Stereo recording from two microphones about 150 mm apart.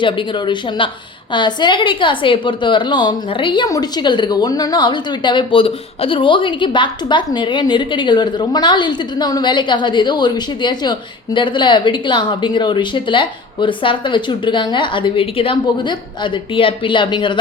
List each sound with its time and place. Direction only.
0.0 s a woman's voice: 30° left (ahead or behind)